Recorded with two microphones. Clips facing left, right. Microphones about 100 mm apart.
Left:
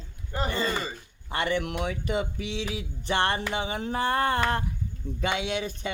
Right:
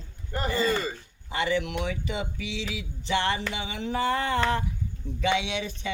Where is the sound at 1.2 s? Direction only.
50° left (ahead or behind).